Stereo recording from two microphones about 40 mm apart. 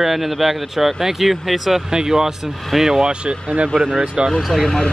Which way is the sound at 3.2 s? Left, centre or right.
Right.